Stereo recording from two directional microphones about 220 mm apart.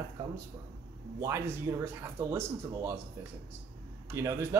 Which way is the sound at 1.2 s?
15° right (ahead or behind).